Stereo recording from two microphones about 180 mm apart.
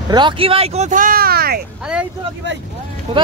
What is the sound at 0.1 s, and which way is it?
Speech, 30° right (ahead or behind).